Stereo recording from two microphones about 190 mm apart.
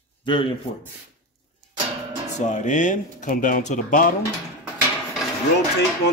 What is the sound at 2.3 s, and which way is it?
Speech, 40° left (ahead or behind).